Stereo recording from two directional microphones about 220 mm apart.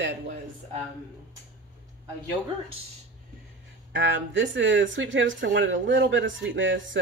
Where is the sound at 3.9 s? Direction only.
55° right (ahead or behind).